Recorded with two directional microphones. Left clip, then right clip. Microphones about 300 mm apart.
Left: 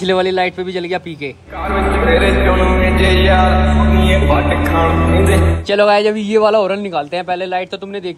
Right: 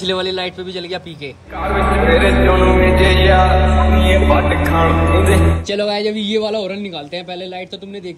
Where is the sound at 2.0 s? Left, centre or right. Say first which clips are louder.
Even; centre.